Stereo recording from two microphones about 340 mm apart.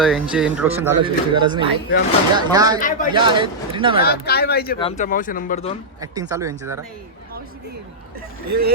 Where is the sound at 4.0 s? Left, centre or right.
Left.